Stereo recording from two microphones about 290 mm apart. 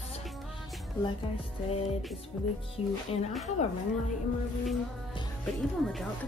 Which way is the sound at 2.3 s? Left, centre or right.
Centre.